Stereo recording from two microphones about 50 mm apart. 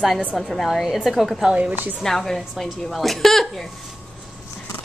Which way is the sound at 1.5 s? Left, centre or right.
Right.